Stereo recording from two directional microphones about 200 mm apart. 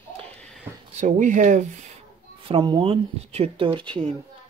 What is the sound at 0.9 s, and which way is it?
Speech, 35° right (ahead or behind).